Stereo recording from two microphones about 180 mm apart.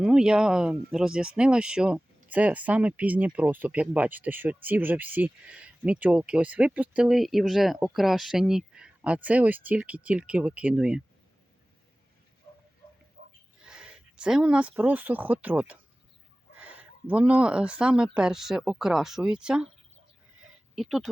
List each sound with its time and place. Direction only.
0.0 s speech: 5° right (ahead or behind)
13.2 s a sound: 55° right (ahead or behind)
13.7 s speech: 5° right (ahead or behind)
20.7 s speech: centre (ahead or behind)